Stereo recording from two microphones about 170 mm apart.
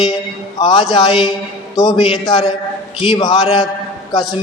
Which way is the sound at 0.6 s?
25° left (ahead or behind).